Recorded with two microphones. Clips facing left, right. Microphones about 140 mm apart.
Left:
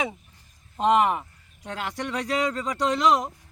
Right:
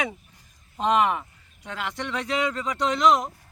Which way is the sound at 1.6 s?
40° left (ahead or behind).